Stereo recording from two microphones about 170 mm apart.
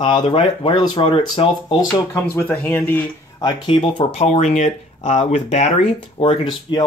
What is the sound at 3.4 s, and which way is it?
Speech, 30° left (ahead or behind).